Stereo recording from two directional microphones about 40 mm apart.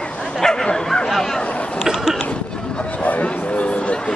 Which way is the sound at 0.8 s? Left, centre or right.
Centre.